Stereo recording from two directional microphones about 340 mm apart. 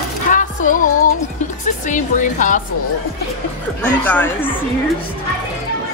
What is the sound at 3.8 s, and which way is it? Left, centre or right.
Speech, centre.